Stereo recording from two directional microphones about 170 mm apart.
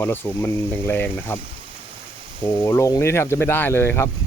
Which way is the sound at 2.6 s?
15° left (ahead or behind).